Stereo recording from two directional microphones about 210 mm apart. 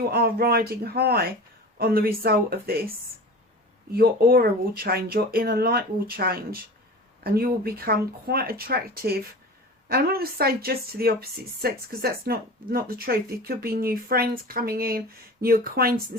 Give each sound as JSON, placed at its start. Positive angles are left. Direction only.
{"t": 0.1, "sound": "speech", "side_deg": -45}
{"t": 3.9, "sound": "speech", "side_deg": -45}